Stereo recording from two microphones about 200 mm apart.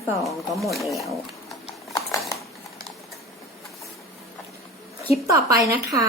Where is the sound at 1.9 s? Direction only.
15° left (ahead or behind).